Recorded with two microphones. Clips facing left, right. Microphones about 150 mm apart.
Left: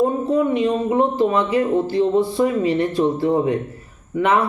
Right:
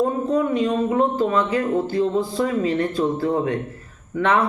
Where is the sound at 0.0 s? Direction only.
10° left (ahead or behind).